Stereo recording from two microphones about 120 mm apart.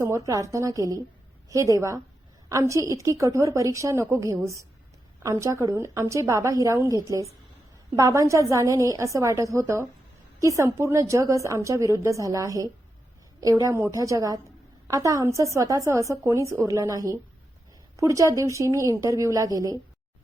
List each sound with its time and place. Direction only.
0.0 s a woman's voice: 25° right (ahead or behind)